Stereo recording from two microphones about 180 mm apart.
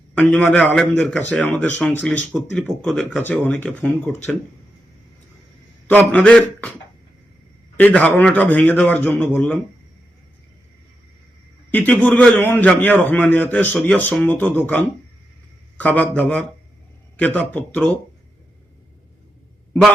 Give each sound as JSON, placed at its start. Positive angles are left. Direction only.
{"t": 0.1, "sound": "a man's voice", "side_deg": 5}
{"t": 5.9, "sound": "a man's voice", "side_deg": 10}
{"t": 7.8, "sound": "a man's voice", "side_deg": 10}
{"t": 11.7, "sound": "a man's voice", "side_deg": 10}